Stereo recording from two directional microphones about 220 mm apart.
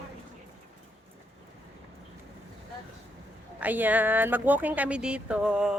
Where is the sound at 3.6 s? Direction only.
5° right (ahead or behind).